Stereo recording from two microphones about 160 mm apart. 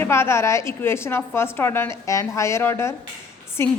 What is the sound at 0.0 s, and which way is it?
A woman's voice, 15° left (ahead or behind).